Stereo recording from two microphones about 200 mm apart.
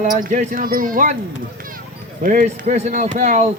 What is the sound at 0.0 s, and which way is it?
Speech, 40° right (ahead or behind).